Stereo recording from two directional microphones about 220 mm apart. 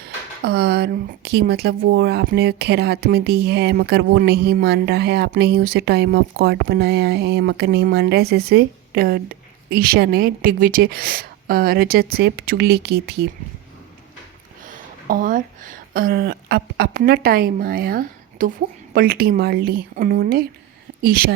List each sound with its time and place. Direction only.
0.0 s speech: 45° right (ahead or behind)
14.7 s speech: 40° right (ahead or behind)